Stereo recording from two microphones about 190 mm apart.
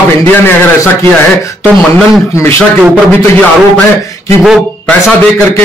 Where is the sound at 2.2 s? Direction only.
15° left (ahead or behind).